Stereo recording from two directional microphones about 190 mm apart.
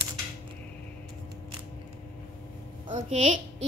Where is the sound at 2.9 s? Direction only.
40° right (ahead or behind).